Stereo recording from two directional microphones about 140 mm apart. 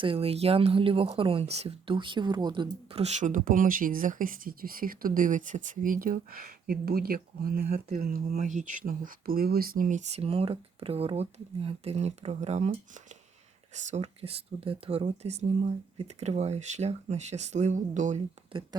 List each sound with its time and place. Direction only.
0.0 s speech: 40° right (ahead or behind)
2.9 s speech: 50° right (ahead or behind); by 7.6 s 90° right
7.7 s speech: 50° right (ahead or behind)
8.0 s speech: 90° right; by 18.2 s 60° right (ahead or behind)
18.7 s speech: 30° right (ahead or behind)